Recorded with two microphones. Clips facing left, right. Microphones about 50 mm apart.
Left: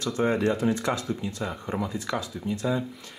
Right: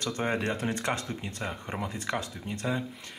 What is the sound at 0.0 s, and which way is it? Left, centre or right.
Speech, right.